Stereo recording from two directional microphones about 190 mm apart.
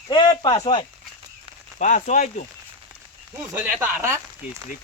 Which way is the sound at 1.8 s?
40° left (ahead or behind).